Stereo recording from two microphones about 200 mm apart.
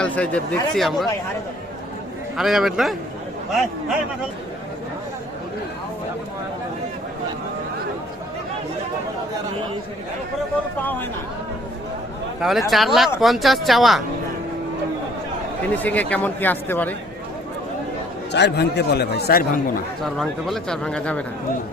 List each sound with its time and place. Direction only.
0.0 s speech: 5° left (ahead or behind)
2.4 s speech: centre (ahead or behind)
12.4 s speech: centre (ahead or behind)
15.7 s speech: 10° left (ahead or behind)
18.3 s speech: 60° left (ahead or behind)
20.1 s speech: centre (ahead or behind)